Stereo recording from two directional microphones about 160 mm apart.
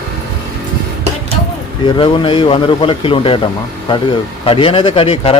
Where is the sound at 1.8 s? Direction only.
30° left (ahead or behind).